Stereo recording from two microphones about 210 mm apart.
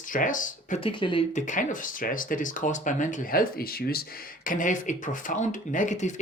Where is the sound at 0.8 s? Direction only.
25° left (ahead or behind).